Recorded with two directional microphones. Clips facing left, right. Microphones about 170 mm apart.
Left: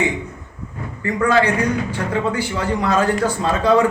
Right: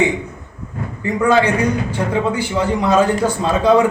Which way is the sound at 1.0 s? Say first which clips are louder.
Right 2 dB; 20° right (ahead or behind).